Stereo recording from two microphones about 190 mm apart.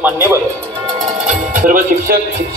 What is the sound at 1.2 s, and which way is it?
Music, 40° right (ahead or behind).